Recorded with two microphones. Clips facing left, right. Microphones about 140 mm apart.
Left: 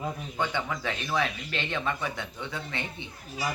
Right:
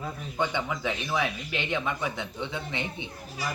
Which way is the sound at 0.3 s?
15° right (ahead or behind).